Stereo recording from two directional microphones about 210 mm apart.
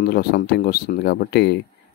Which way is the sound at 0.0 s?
45° left (ahead or behind).